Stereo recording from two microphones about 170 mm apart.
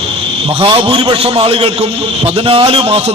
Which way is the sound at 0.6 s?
30° right (ahead or behind).